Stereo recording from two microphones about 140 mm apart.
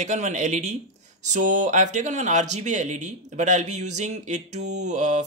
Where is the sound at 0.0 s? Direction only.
55° right (ahead or behind).